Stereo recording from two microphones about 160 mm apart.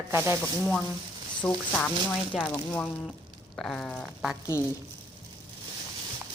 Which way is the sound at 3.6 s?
5° left (ahead or behind).